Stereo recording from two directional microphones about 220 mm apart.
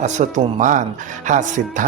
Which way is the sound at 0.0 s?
35° right (ahead or behind).